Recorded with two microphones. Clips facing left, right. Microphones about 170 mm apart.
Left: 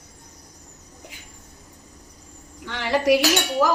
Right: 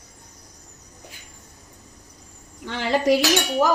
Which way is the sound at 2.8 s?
20° right (ahead or behind).